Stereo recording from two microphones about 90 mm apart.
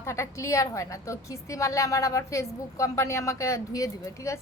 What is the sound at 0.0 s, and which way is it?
A woman's voice, 30° left (ahead or behind).